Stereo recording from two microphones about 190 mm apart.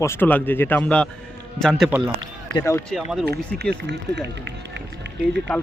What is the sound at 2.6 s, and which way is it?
Speech, 15° left (ahead or behind).